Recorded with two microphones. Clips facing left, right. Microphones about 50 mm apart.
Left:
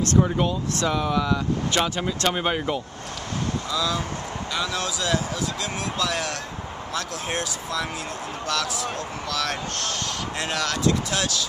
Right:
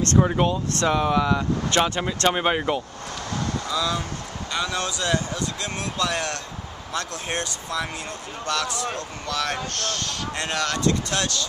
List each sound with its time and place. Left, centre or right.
0.2 s speech: centre